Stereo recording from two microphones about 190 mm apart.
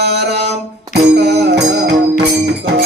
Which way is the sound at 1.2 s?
60° right (ahead or behind).